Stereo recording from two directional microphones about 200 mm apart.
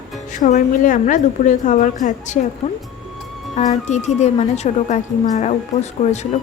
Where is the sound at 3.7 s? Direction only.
35° left (ahead or behind).